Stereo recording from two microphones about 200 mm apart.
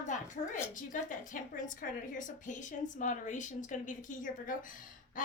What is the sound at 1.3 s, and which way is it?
A woman's voice, 40° left (ahead or behind).